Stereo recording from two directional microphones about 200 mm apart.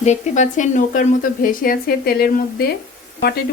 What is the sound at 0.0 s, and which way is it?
Speech, 35° left (ahead or behind).